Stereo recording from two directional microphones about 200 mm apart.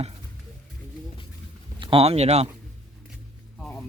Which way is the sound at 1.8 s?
25° right (ahead or behind).